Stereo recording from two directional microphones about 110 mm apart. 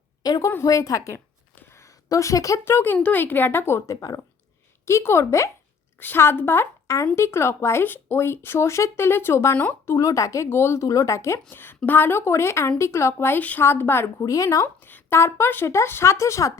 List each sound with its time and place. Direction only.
0.2 s a woman's voice: 35° left (ahead or behind)